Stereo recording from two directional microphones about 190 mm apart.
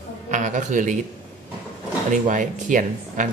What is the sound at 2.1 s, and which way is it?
A man's voice, 45° right (ahead or behind).